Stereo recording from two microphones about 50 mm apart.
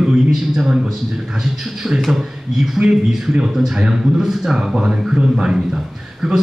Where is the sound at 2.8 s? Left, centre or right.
Centre.